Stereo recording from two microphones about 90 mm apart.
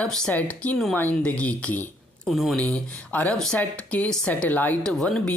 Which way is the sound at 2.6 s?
15° left (ahead or behind).